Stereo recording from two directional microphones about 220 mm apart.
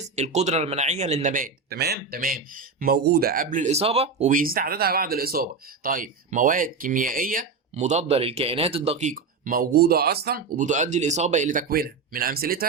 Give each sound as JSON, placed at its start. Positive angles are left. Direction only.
{"t": 0.0, "sound": "speech", "side_deg": -30}